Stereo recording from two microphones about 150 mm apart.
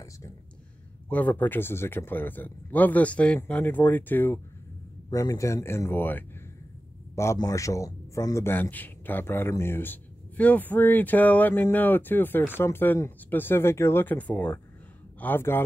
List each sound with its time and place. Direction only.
1.0 s speech: 10° left (ahead or behind)
5.1 s speech: 25° left (ahead or behind)